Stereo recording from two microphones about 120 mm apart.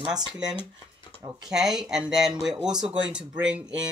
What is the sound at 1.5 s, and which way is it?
Speech, 5° right (ahead or behind).